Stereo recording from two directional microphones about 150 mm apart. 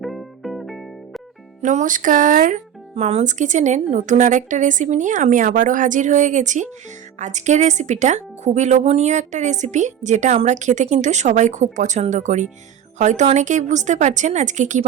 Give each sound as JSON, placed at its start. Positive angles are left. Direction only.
{"t": 0.0, "sound": "music", "side_deg": 0}
{"t": 1.6, "sound": "a woman's voice", "side_deg": -55}
{"t": 2.9, "sound": "a woman's voice", "side_deg": -45}